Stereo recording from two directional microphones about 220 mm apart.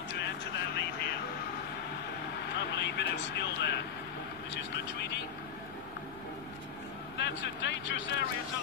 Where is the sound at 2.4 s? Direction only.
50° left (ahead or behind).